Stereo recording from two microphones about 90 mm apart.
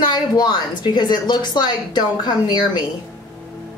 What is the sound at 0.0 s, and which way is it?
Speech, 55° left (ahead or behind).